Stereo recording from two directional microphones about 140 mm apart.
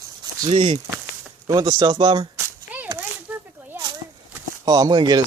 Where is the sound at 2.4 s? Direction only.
10° right (ahead or behind).